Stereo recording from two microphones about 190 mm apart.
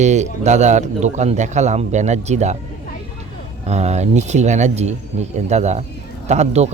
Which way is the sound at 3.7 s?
35° right (ahead or behind).